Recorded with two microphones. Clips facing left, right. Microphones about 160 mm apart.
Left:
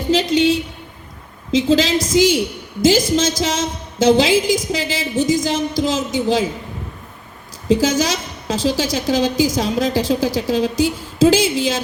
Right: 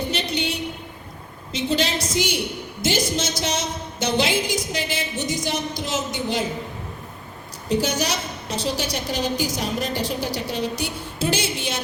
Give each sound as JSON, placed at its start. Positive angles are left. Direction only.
{"t": 0.1, "sound": "a sound", "side_deg": 90}
{"t": 1.5, "sound": "a woman's voice", "side_deg": 90}
{"t": 7.7, "sound": "a woman's voice", "side_deg": 90}